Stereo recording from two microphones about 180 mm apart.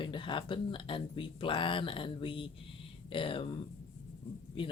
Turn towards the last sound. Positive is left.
turn(degrees=30)  # may be behind; listen again after turning